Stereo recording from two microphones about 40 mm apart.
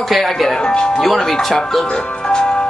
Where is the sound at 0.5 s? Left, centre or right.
Centre.